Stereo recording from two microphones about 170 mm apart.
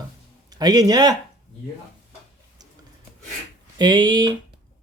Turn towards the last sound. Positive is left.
turn(degrees=-25)  # may be behind; listen again after turning